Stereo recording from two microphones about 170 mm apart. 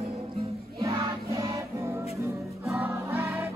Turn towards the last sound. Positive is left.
turn(degrees=-15)  # may be behind; listen again after turning